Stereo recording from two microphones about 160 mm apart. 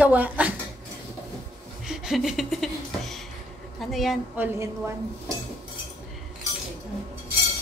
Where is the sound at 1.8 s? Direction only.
Centre (ahead or behind).